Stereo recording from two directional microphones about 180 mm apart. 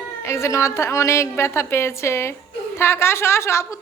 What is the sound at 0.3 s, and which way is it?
A woman's voice, 15° left (ahead or behind).